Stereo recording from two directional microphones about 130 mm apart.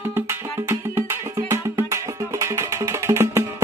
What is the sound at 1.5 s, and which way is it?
Music, 20° right (ahead or behind).